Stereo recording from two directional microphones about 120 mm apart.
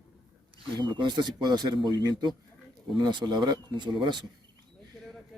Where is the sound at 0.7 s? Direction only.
40° right (ahead or behind).